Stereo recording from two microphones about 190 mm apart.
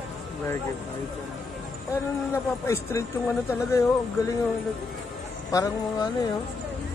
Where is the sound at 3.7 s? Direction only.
15° left (ahead or behind).